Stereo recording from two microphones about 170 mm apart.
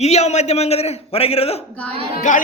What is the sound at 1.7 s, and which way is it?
Speech, 5° left (ahead or behind).